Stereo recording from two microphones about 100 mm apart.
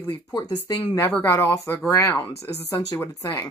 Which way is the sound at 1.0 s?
20° left (ahead or behind).